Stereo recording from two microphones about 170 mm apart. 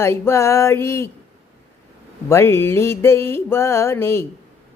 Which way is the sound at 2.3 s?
15° left (ahead or behind).